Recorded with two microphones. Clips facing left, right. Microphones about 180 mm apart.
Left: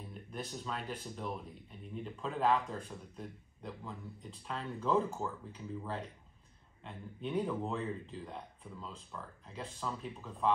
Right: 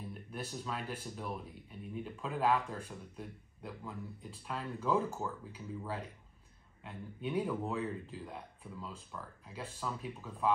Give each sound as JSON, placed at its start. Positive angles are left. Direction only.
{"t": 0.1, "sound": "speech", "side_deg": -5}